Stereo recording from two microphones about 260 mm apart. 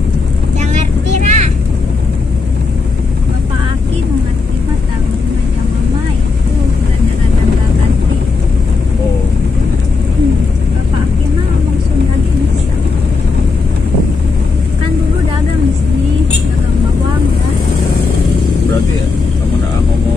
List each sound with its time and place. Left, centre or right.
1.2 s vehicle: right